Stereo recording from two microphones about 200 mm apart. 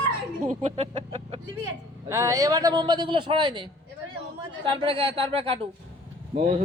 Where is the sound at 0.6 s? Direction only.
30° right (ahead or behind).